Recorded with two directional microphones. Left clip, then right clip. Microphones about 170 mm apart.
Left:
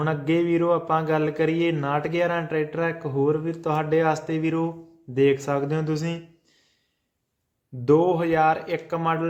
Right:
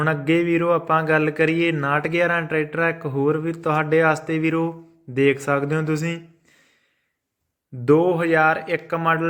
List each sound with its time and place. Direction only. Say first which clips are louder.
0.0 s a man's voice: right 3 dB; 15° right (ahead or behind)
7.9 s a man's voice: right 2 dB; 15° right (ahead or behind)